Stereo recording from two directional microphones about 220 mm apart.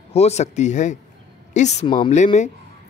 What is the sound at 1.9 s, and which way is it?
Speech, 20° left (ahead or behind).